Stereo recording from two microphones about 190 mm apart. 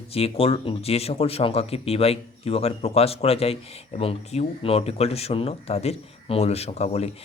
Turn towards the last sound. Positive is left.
turn(degrees=35)  # may be behind; listen again after turning